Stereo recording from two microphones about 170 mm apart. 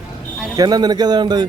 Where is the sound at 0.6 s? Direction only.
25° right (ahead or behind).